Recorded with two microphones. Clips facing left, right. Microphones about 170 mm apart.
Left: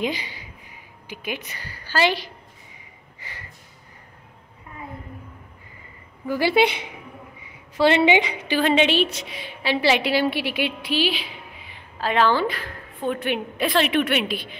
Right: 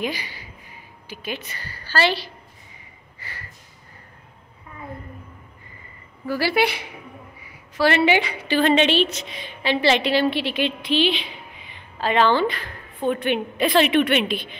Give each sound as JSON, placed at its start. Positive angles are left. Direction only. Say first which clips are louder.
{"t": 0.0, "sound": "a woman's voice", "louder": "left 1 dB", "side_deg": 20}
{"t": 3.2, "sound": "a sound", "louder": "right 1 dB", "side_deg": 20}
{"t": 6.2, "sound": "a woman's voice", "louder": "left 2 dB", "side_deg": 20}